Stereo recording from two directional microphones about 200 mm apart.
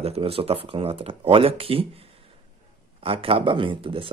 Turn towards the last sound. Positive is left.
turn(degrees=-25)  # may be behind; listen again after turning